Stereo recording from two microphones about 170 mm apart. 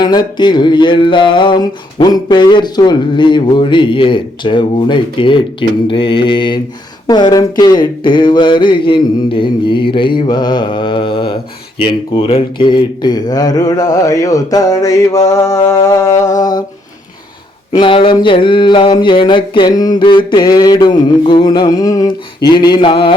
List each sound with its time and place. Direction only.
0.0 s music: 25° left (ahead or behind)
17.7 s music: 30° left (ahead or behind)